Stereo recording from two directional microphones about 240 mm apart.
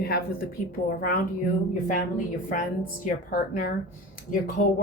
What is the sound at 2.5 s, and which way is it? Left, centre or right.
Speech, left.